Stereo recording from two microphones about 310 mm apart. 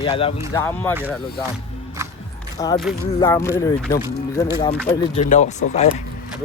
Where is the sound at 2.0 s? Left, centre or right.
Centre.